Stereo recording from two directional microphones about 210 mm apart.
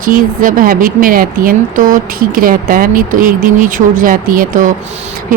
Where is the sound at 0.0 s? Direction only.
40° right (ahead or behind).